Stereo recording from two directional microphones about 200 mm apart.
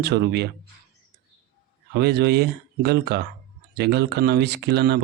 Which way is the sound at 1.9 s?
55° right (ahead or behind).